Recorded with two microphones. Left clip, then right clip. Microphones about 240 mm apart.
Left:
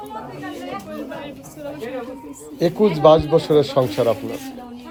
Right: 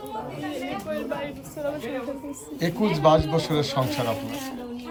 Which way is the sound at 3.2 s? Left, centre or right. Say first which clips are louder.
Left 9 dB; right.